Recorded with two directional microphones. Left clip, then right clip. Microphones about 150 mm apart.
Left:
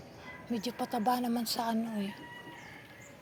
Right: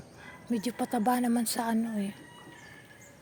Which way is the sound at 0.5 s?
90° right.